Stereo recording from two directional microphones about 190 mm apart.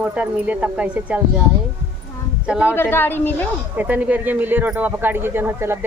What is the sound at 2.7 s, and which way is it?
Speech, 10° left (ahead or behind).